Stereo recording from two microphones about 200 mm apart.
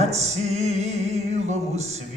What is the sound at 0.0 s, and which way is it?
Music, 35° right (ahead or behind).